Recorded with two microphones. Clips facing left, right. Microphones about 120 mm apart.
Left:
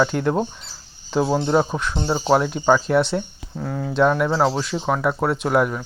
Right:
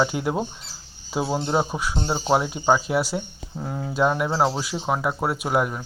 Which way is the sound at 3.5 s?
20° right (ahead or behind).